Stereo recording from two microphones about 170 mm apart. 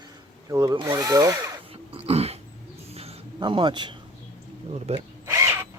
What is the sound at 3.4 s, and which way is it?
Speech, 25° right (ahead or behind).